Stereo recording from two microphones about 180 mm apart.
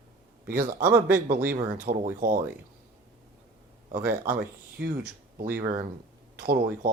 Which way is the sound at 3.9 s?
50° right (ahead or behind).